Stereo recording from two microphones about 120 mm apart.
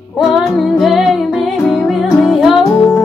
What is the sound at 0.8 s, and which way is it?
Music, centre (ahead or behind).